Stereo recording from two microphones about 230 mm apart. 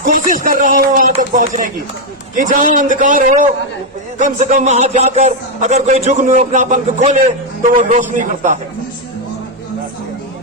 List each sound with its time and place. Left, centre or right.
0.0 s a man's voice: right